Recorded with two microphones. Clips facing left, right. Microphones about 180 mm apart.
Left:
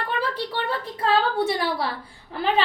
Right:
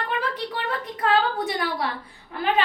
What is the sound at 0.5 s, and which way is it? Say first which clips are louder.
A woman's voice: left 1 dB; 30° left (ahead or behind).